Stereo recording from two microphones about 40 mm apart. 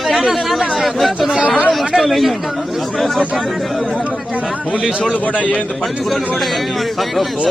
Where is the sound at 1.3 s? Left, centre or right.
Right.